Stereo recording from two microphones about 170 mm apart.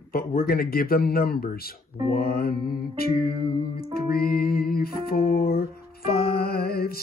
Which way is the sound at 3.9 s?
65° left (ahead or behind).